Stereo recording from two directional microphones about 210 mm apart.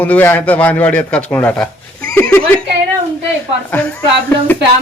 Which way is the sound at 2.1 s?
10° left (ahead or behind).